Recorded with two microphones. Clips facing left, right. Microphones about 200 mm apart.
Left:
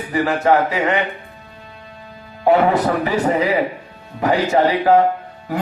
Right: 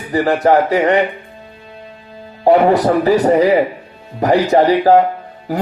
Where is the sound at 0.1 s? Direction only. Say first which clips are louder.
Right 4 dB; 35° right (ahead or behind).